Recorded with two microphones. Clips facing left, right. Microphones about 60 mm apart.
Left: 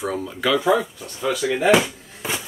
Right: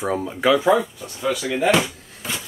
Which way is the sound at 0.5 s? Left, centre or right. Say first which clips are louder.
Left 1 dB; centre.